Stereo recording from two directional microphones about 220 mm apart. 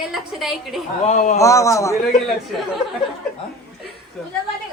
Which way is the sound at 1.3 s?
15° left (ahead or behind).